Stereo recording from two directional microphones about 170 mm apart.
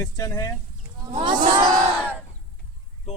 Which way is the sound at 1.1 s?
40° right (ahead or behind).